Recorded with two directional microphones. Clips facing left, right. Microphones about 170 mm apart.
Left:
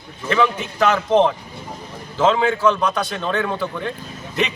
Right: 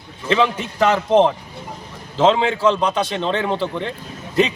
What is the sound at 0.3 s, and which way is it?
A man's voice, 25° right (ahead or behind).